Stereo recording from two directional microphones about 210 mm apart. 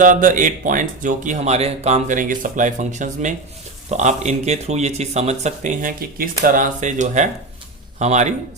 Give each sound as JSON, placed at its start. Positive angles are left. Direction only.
{"t": 0.0, "sound": "speech", "side_deg": -40}